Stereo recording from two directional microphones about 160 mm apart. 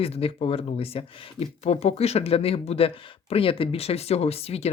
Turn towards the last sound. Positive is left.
turn(degrees=40)  # may be behind; listen again after turning